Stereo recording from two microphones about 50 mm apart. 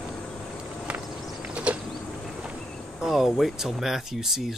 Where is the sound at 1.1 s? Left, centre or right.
Centre.